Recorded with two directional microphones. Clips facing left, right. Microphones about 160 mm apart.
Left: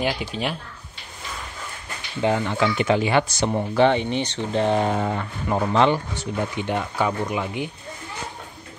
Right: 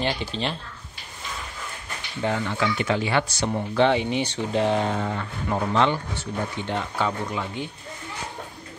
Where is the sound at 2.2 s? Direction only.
25° left (ahead or behind).